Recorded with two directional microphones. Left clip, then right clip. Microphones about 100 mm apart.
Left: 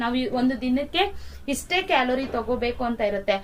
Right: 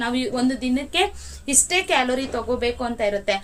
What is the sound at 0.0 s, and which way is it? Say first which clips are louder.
A woman's voice: right 1 dB; 30° right (ahead or behind).